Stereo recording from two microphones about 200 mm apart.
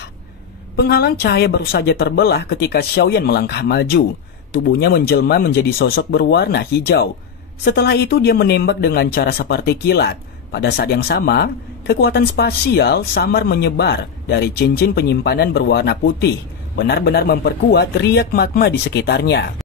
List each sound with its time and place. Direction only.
0.7 s speech: 55° left (ahead or behind)